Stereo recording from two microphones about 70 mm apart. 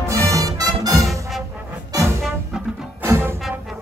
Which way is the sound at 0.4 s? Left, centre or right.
Right.